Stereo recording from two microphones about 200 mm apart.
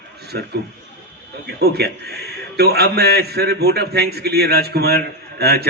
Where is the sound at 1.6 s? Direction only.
55° right (ahead or behind).